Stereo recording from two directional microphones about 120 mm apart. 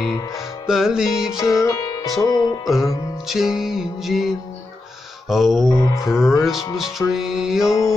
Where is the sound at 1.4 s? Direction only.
30° left (ahead or behind).